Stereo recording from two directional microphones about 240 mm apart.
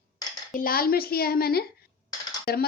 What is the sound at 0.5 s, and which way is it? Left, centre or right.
A woman's voice, left.